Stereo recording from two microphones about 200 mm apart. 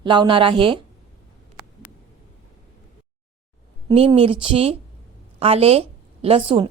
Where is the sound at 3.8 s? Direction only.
25° right (ahead or behind).